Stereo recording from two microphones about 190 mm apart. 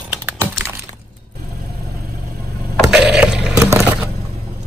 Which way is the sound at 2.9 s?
5° right (ahead or behind).